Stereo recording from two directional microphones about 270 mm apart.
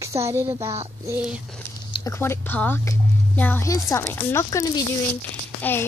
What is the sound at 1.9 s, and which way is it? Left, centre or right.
Speech, centre.